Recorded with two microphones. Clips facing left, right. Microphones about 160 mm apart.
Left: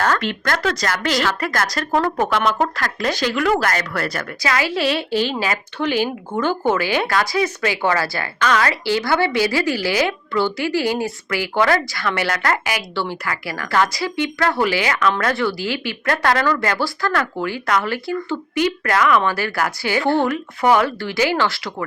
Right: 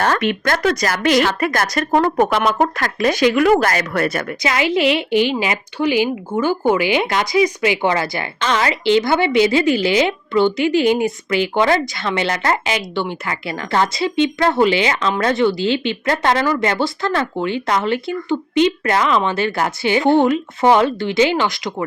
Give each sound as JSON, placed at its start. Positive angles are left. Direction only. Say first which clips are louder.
{"t": 0.0, "sound": "speech", "louder": "right 3 dB", "side_deg": -20}